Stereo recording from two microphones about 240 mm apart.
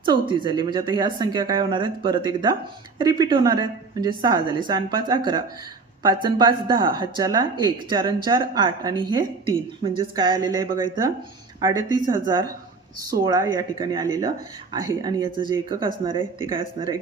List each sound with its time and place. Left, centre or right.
0.0 s a woman's voice: centre